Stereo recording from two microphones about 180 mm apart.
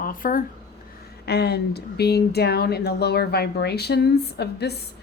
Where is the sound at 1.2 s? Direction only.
65° left (ahead or behind).